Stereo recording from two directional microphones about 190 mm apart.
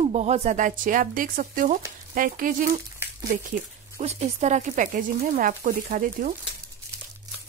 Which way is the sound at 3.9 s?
35° right (ahead or behind).